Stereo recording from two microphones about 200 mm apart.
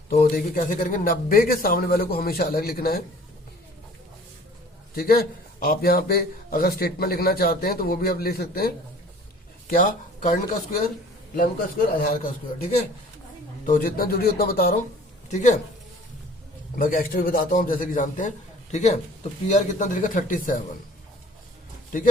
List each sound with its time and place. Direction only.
0.1 s a man's voice: 50° left (ahead or behind)
4.9 s a man's voice: 50° left (ahead or behind)
11.9 s a man's voice: 45° left (ahead or behind)
13.7 s a man's voice: 45° left (ahead or behind)
15.3 s speech: 40° left (ahead or behind)
16.7 s a man's voice: 45° left (ahead or behind)